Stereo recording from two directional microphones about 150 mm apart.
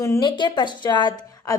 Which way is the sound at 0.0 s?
20° left (ahead or behind).